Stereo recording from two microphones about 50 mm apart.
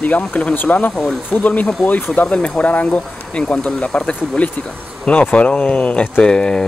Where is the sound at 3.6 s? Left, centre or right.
Centre.